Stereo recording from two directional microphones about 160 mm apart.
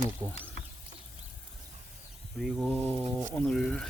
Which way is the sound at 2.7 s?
10° left (ahead or behind).